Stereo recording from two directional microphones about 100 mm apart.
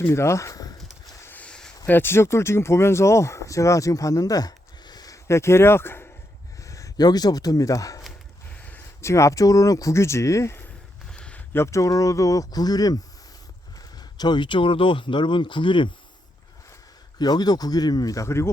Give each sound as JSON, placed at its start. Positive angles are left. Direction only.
{"t": 0.0, "sound": "speech", "side_deg": 25}
{"t": 1.2, "sound": "a sound", "side_deg": 15}
{"t": 1.9, "sound": "speech", "side_deg": 25}
{"t": 11.1, "sound": "a sound", "side_deg": 10}
{"t": 11.5, "sound": "speech", "side_deg": 30}
{"t": 17.2, "sound": "speech", "side_deg": 45}